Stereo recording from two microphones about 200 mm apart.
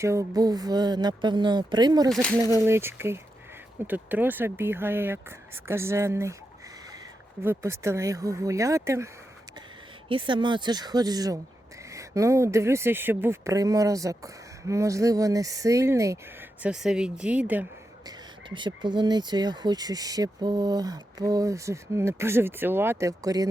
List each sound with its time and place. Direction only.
0.0 s speech: 15° right (ahead or behind)
2.0 s speech: centre (ahead or behind)
2.6 s speech: 10° right (ahead or behind)
7.4 s speech: 15° right (ahead or behind)
10.1 s speech: 25° right (ahead or behind)
16.6 s speech: 5° right (ahead or behind)
18.0 s speech: 25° right (ahead or behind)